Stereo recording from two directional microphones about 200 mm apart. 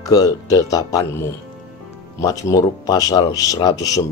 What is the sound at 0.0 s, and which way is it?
Speech, 20° left (ahead or behind).